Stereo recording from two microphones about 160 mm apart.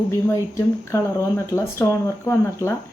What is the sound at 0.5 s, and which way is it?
Speech, 20° left (ahead or behind).